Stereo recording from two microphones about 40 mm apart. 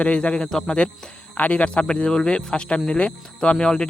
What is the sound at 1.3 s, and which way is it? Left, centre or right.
Speech, left.